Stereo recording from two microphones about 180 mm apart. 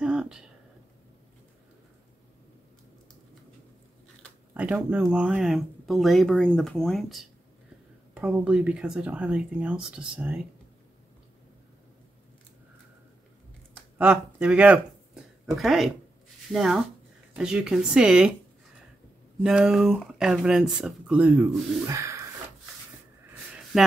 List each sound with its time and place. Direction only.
0.0 s a sound: 5° right (ahead or behind)
4.6 s speech: 5° right (ahead or behind)
13.9 s speech: 10° right (ahead or behind)
19.4 s speech: 5° right (ahead or behind)